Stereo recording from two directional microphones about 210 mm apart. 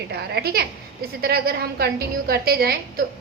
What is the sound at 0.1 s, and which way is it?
A woman's voice, 50° right (ahead or behind).